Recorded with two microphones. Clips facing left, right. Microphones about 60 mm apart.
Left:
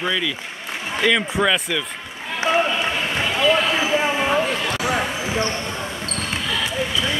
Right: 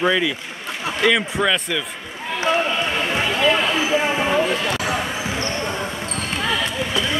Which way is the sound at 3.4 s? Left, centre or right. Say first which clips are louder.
Left 1 dB; centre.